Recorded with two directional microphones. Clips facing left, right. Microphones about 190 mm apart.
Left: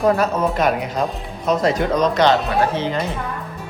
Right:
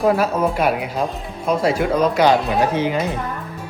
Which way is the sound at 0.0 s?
5° right (ahead or behind).